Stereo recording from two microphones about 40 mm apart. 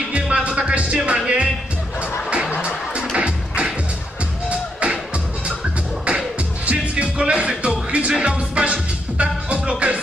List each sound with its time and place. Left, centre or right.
0.3 s music: right
2.6 s music: right
6.6 s music: right